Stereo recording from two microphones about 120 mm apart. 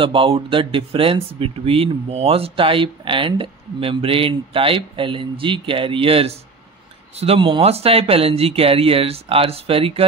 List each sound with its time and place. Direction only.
0.0 s speech: 45° right (ahead or behind)